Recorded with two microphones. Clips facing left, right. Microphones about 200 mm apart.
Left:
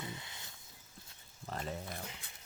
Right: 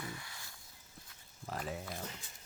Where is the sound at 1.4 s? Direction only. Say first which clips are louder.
Even; 5° right (ahead or behind).